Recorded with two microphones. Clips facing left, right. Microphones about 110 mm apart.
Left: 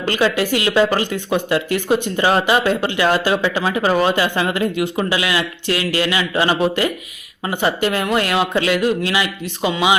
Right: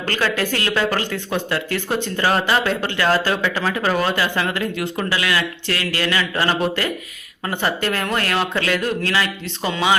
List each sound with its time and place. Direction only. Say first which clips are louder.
0.0 s speech: left 4 dB; 15° left (ahead or behind)